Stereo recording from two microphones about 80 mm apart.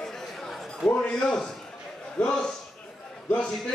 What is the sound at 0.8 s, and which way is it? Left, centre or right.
A man's voice, centre.